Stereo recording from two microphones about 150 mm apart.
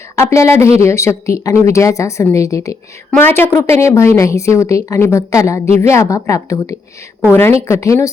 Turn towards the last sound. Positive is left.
turn(degrees=20)  # may be behind; listen again after turning